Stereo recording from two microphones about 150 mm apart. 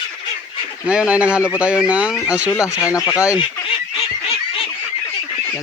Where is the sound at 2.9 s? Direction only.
20° left (ahead or behind).